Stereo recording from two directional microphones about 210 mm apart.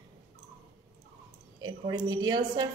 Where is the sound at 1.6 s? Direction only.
20° right (ahead or behind).